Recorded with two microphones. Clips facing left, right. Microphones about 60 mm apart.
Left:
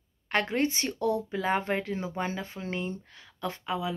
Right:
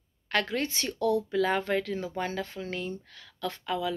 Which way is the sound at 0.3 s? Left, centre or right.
Left.